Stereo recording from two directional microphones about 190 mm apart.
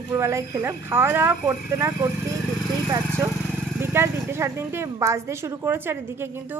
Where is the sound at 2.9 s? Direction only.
15° right (ahead or behind).